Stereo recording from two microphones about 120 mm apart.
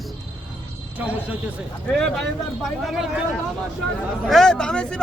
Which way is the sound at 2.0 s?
5° left (ahead or behind).